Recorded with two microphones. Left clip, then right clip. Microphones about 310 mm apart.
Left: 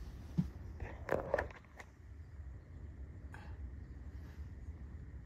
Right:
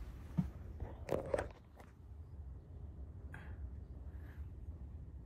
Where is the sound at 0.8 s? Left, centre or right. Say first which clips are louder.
Left 2 dB; centre.